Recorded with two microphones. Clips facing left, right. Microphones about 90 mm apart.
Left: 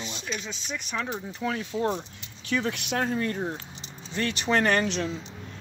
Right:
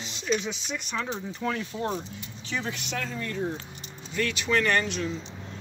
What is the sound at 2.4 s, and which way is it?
Speech, 60° left (ahead or behind).